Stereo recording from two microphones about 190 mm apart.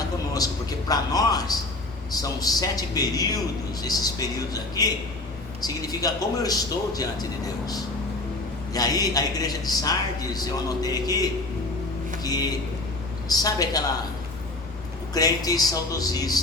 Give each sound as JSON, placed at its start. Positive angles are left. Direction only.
{"t": 0.9, "sound": "a man's voice", "side_deg": 20}
{"t": 12.2, "sound": "a man's voice", "side_deg": 20}
{"t": 15.1, "sound": "a man's voice", "side_deg": 20}